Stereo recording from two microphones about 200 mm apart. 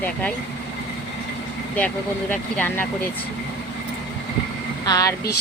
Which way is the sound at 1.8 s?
5° left (ahead or behind).